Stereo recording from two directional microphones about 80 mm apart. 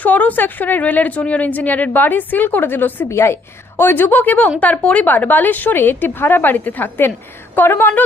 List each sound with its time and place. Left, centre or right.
0.0 s a woman's voice: left